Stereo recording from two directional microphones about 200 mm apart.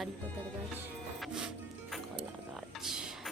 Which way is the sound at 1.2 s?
5° right (ahead or behind).